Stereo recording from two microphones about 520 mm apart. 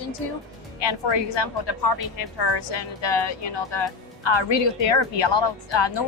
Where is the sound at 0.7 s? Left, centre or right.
Left.